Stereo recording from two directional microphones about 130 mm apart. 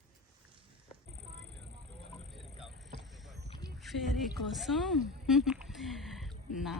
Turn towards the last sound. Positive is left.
turn(degrees=0)  # may be behind; listen again after turning